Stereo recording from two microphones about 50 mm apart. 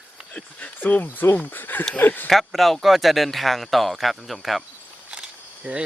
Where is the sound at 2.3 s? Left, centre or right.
Centre.